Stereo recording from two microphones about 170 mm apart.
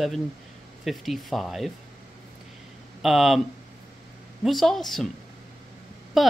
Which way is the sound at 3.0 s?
Centre (ahead or behind).